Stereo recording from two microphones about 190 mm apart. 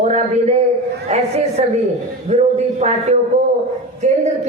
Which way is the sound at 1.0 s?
35° right (ahead or behind).